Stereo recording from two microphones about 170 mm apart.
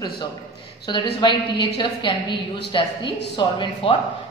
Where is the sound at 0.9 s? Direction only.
25° left (ahead or behind).